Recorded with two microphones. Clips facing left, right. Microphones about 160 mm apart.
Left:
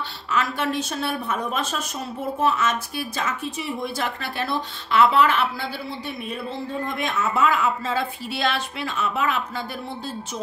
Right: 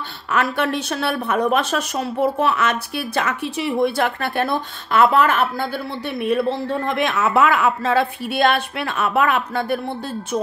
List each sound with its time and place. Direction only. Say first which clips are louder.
0.3 s a woman's voice: right 4 dB; 60° right (ahead or behind)